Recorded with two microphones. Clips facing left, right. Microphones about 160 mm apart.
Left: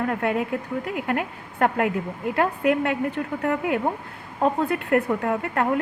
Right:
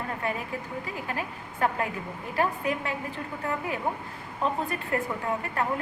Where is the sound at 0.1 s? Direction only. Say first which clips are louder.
Left 8 dB; 70° left (ahead or behind).